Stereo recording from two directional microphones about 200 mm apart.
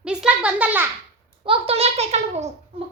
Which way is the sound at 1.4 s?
25° right (ahead or behind).